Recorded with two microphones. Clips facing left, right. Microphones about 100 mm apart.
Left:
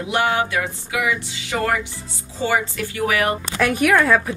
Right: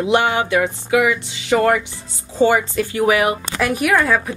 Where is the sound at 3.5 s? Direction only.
5° right (ahead or behind).